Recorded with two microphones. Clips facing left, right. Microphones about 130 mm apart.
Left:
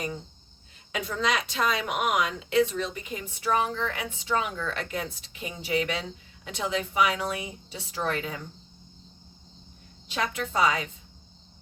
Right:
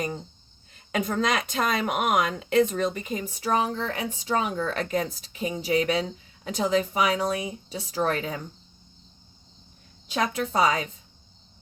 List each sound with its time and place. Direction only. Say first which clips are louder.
0.9 s speech: right 3 dB; 45° right (ahead or behind)
10.2 s speech: right 3 dB; 40° right (ahead or behind)